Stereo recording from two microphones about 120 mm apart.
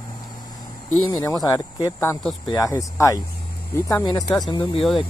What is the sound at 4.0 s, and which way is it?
Speech, 40° left (ahead or behind).